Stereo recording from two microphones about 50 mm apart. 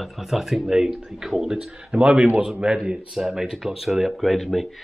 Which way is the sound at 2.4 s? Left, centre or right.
Centre.